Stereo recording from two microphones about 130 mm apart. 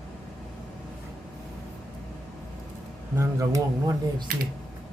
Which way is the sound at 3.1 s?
25° right (ahead or behind).